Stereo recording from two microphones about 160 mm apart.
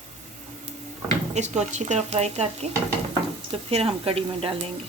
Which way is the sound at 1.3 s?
45° right (ahead or behind).